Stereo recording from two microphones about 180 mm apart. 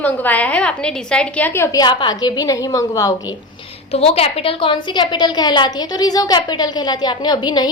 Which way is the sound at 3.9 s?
35° left (ahead or behind).